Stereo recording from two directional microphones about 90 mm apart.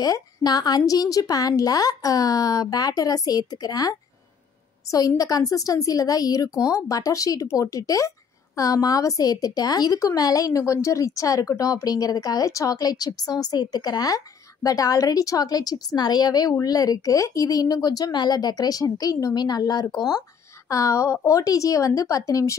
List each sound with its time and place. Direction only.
0.0 s a woman's voice: 45° left (ahead or behind)
4.9 s a woman's voice: 40° left (ahead or behind)